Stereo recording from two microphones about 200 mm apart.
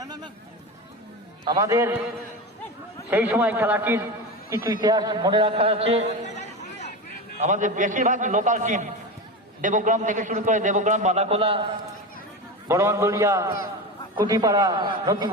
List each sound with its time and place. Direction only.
0.0 s a sound: 20° right (ahead or behind)
1.5 s a man's voice: 15° right (ahead or behind)
3.1 s a man's voice: 10° right (ahead or behind); by 6.1 s 30° right (ahead or behind)
6.2 s a sound: 35° left (ahead or behind)
7.3 s a man's voice: 35° right (ahead or behind)
12.6 s a man's voice: 15° right (ahead or behind)